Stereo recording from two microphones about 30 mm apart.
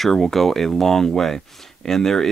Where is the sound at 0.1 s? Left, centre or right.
Centre.